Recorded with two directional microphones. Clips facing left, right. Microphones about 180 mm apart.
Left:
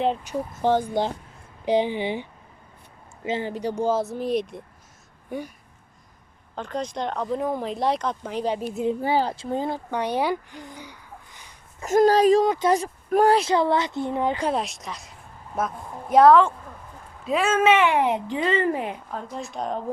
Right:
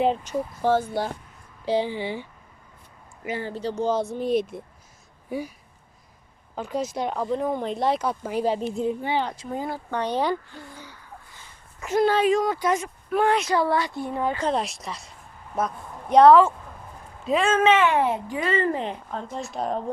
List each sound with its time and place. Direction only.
0.5 s speech: 20° left (ahead or behind)
3.2 s speech: 20° left (ahead or behind); by 4.6 s centre (ahead or behind)
6.6 s speech: 5° right (ahead or behind)
8.5 s speech: 5° left (ahead or behind)
9.0 s speech: 40° left (ahead or behind)
9.9 s a sound: 10° left (ahead or behind)
11.8 s speech: 40° left (ahead or behind)
12.5 s speech: 20° left (ahead or behind)
12.7 s speech: 40° left (ahead or behind); by 14.5 s 15° left (ahead or behind)
14.5 s a woman's voice: centre (ahead or behind)